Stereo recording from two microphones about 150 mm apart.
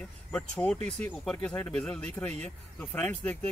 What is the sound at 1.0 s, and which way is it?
Speech, 10° left (ahead or behind).